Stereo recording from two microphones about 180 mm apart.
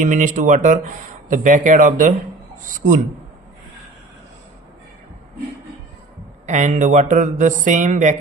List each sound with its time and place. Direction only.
0.0 s speech: 45° right (ahead or behind)
6.4 s speech: 40° right (ahead or behind)